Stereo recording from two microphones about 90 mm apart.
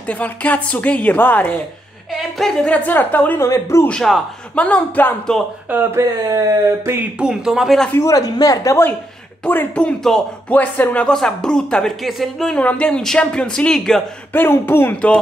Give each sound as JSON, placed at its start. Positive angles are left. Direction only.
{"t": 0.0, "sound": "speech", "side_deg": 15}
{"t": 2.0, "sound": "a woman's voice", "side_deg": 5}
{"t": 3.3, "sound": "speech", "side_deg": 35}
{"t": 4.6, "sound": "speech", "side_deg": 15}
{"t": 5.7, "sound": "speech", "side_deg": -25}
{"t": 6.2, "sound": "speech", "side_deg": -40}
{"t": 7.0, "sound": "speech", "side_deg": -10}
{"t": 8.0, "sound": "speech", "side_deg": 40}
{"t": 9.4, "sound": "speech", "side_deg": 15}
{"t": 14.3, "sound": "speech", "side_deg": 25}